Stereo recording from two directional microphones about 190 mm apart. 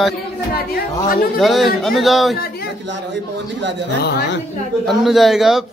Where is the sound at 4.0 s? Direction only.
60° left (ahead or behind).